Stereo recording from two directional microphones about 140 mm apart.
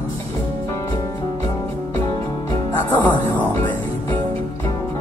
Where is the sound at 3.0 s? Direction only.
10° left (ahead or behind).